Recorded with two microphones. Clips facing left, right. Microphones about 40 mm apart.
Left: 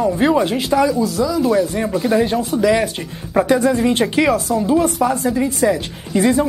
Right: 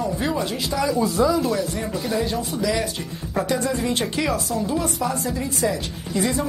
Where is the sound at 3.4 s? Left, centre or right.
Left.